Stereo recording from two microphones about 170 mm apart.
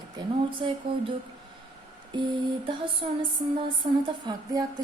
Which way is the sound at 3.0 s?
40° right (ahead or behind).